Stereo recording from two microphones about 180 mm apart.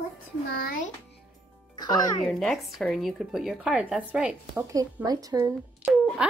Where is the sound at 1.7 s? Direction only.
25° left (ahead or behind).